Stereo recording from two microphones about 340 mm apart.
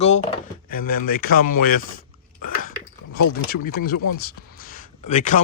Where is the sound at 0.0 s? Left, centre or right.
Centre.